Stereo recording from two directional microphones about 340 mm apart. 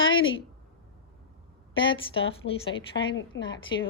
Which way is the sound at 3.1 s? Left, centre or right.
Left.